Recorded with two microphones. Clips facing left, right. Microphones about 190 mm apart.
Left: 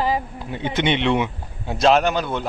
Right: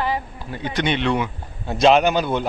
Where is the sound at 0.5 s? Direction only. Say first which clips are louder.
Left 1 dB; 20° left (ahead or behind).